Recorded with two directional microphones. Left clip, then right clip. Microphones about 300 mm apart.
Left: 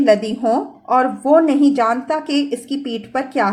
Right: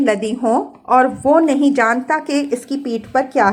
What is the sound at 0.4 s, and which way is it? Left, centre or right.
A woman's voice, centre.